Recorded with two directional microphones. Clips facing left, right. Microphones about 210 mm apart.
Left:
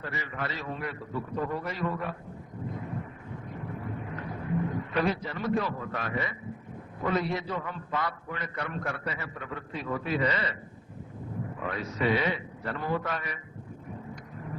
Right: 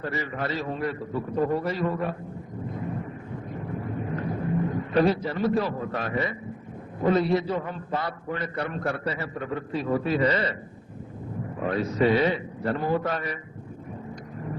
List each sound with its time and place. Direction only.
0.0 s a man's voice: 35° right (ahead or behind)
4.1 s a sound: 35° right (ahead or behind)
4.9 s a man's voice: 35° right (ahead or behind)
11.6 s a man's voice: 35° right (ahead or behind)